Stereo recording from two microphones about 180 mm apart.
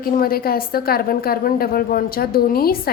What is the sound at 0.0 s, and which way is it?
A woman's voice, 55° left (ahead or behind).